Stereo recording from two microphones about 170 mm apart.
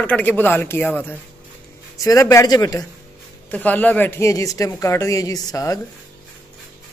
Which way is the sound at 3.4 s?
10° left (ahead or behind).